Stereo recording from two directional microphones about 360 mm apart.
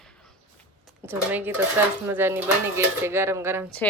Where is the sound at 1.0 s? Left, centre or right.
Centre.